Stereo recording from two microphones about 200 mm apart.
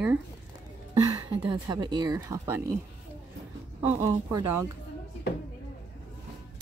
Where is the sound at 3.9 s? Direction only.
15° right (ahead or behind).